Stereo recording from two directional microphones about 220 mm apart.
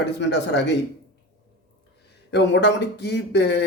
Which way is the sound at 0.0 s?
50° left (ahead or behind).